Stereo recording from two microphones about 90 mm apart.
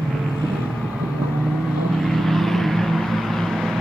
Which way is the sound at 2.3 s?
5° left (ahead or behind).